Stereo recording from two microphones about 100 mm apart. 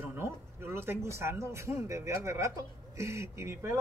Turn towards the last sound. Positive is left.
turn(degrees=-25)  # may be behind; listen again after turning